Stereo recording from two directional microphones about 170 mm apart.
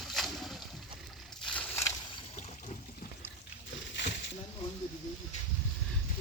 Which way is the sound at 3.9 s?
90° left.